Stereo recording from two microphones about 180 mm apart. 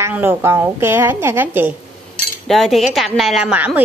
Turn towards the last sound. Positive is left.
turn(degrees=-5)  # may be behind; listen again after turning